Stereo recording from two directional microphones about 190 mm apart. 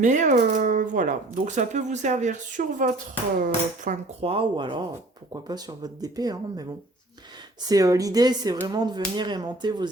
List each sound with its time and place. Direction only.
0.0 s speech: 40° right (ahead or behind); by 6.7 s 20° right (ahead or behind)
7.7 s speech: 20° right (ahead or behind)